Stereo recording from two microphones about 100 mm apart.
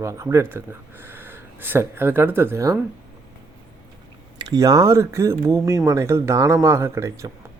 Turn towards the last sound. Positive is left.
turn(degrees=-30)  # may be behind; listen again after turning